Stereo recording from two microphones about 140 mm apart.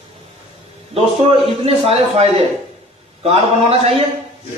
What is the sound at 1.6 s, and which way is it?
A man's voice, 45° right (ahead or behind).